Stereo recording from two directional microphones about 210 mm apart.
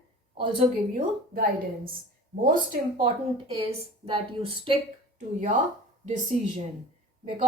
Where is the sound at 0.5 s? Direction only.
30° right (ahead or behind).